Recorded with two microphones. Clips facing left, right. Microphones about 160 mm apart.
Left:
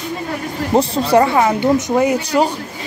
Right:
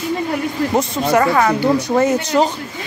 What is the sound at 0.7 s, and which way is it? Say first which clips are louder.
Speech: left 4 dB; 30° left (ahead or behind).